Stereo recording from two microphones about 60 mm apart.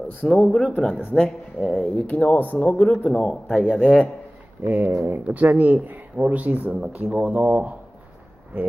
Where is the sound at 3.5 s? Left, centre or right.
Centre.